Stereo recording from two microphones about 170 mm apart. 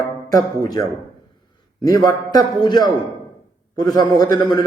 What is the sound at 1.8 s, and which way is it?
Speech, 20° left (ahead or behind).